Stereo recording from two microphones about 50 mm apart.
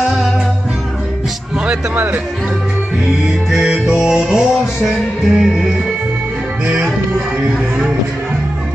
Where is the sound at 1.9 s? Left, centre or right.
Right.